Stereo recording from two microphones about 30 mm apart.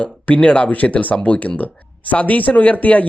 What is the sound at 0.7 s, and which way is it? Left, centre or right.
Speech, left.